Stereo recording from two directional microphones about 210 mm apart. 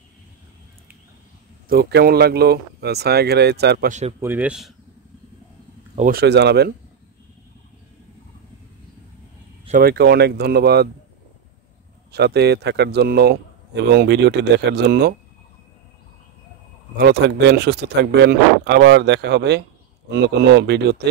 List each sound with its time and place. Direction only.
1.7 s speech: 50° right (ahead or behind)
4.2 s speech: 10° right (ahead or behind)
5.9 s speech: 45° right (ahead or behind)
9.7 s speech: 45° right (ahead or behind)
12.1 s speech: 50° right (ahead or behind)
16.9 s speech: 50° right (ahead or behind)